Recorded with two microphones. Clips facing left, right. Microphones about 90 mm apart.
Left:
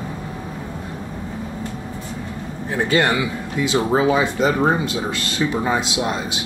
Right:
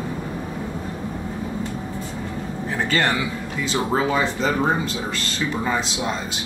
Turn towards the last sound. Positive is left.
turn(degrees=15)  # may be behind; listen again after turning